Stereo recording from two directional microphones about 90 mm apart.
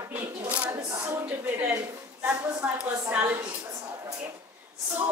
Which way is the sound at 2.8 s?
15° right (ahead or behind).